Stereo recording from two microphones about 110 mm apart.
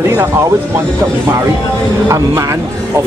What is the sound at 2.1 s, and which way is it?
Speech, 30° right (ahead or behind).